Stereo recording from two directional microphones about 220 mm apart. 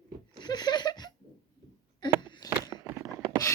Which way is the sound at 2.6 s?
15° right (ahead or behind).